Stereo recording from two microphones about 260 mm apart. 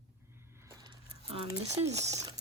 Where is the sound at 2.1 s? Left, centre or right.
Centre.